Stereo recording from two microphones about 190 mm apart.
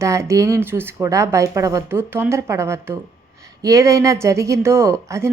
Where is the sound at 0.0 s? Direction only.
15° right (ahead or behind).